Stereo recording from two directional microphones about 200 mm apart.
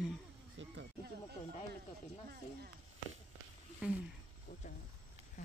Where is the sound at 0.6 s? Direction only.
65° right (ahead or behind).